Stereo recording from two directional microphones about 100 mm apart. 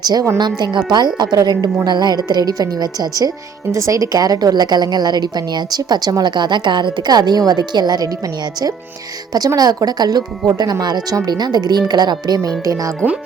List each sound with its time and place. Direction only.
0.0 s speech: 45° right (ahead or behind)
9.6 s speech: 40° right (ahead or behind)